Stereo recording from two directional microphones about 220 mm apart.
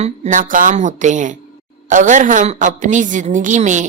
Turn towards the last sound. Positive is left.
turn(degrees=-35)  # may be behind; listen again after turning